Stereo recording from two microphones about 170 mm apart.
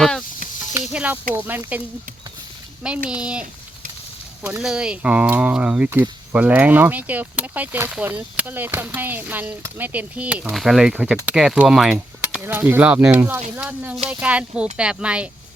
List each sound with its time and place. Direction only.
0.0 s sizzle: 5° left (ahead or behind)
0.8 s snake: 10° right (ahead or behind)
1.3 s speech: 10° right (ahead or behind)
3.1 s speech: 5° right (ahead or behind)
4.4 s speech: 5° right (ahead or behind)